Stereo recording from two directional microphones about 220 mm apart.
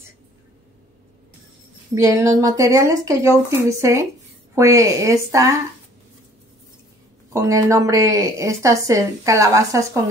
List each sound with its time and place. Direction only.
2.0 s speech: 15° right (ahead or behind)
7.3 s speech: 15° right (ahead or behind)